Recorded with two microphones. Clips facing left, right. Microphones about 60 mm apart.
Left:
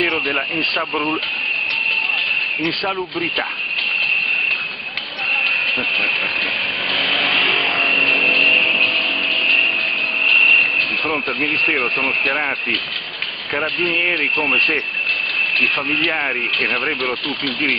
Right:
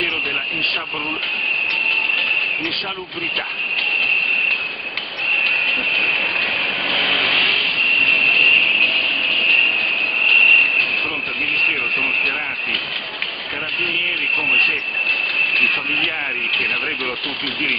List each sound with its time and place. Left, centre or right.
0.0 s speech: left
0.7 s speech: centre
2.8 s speech: left
5.9 s vehicle: centre
13.5 s speech: left
14.3 s speech: centre
16.1 s speech: left
17.0 s speech: centre